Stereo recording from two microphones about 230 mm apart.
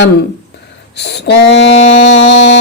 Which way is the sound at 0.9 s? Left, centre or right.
Left.